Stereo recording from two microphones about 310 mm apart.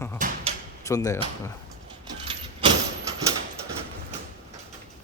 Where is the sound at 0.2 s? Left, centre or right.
Right.